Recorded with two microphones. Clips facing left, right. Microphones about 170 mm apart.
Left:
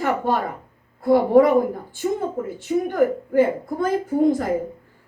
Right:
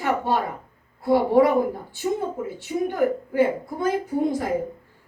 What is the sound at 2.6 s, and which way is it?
A woman's voice, 50° left (ahead or behind).